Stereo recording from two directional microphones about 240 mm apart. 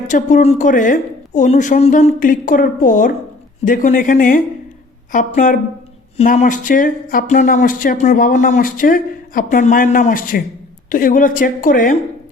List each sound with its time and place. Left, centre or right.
0.1 s speech: left